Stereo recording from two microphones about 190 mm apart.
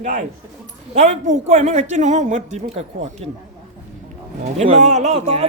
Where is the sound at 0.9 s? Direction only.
40° right (ahead or behind).